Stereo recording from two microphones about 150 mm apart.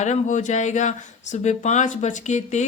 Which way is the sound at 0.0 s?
55° left (ahead or behind).